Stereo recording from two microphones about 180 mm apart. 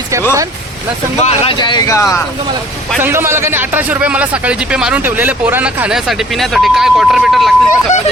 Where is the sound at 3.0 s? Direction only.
15° right (ahead or behind).